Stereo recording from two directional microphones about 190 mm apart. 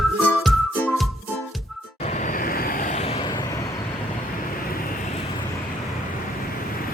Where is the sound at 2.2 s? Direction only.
45° left (ahead or behind).